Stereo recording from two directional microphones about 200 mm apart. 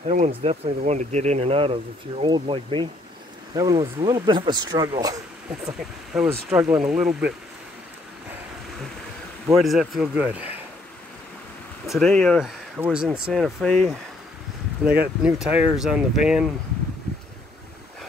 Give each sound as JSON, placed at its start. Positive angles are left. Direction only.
{"t": 0.0, "sound": "speech", "side_deg": -35}
{"t": 6.1, "sound": "speech", "side_deg": -5}
{"t": 9.6, "sound": "speech", "side_deg": 0}
{"t": 11.9, "sound": "speech", "side_deg": 5}